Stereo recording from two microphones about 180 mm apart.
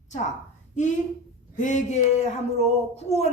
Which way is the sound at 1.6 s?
45° left (ahead or behind).